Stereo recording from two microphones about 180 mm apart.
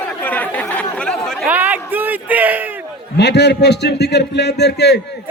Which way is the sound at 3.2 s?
70° left (ahead or behind).